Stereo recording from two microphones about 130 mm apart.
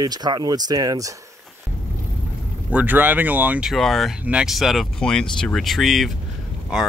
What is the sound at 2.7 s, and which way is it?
Speech, 10° right (ahead or behind).